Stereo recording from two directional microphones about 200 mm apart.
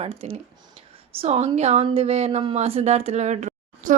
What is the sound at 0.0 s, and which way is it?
A woman's voice, 30° right (ahead or behind).